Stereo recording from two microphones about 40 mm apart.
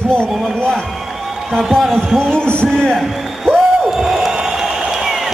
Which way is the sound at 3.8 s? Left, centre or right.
Centre.